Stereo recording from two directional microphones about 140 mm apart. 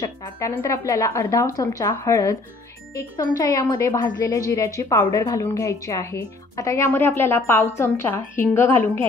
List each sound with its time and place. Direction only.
0.0 s a woman's voice: 25° left (ahead or behind)